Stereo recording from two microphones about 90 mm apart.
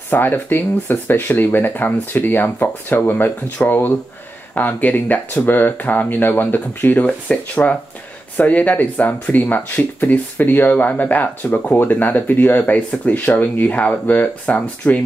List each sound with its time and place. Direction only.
0.1 s speech: 20° left (ahead or behind)